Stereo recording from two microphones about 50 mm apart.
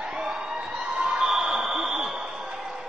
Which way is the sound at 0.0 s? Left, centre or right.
Centre.